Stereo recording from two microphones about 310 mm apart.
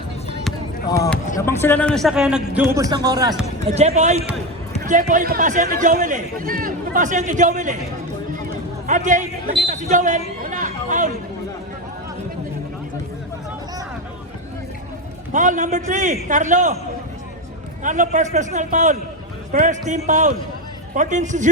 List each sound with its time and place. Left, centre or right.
0.9 s a man's voice: centre; by 7.8 s right
8.9 s speech: right
9.6 s a sound: right
15.3 s speech: right
17.8 s speech: right